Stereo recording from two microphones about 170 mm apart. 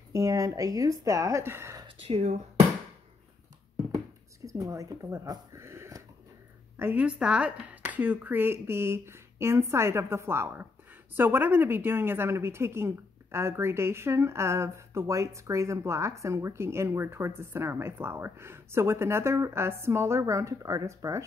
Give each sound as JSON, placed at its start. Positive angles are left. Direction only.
{"t": 0.1, "sound": "speech", "side_deg": -20}
{"t": 2.0, "sound": "speech", "side_deg": -35}
{"t": 4.5, "sound": "a woman's voice", "side_deg": -20}